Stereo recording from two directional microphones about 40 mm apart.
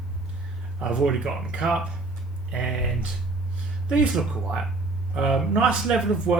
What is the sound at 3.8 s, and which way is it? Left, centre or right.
Speech, right.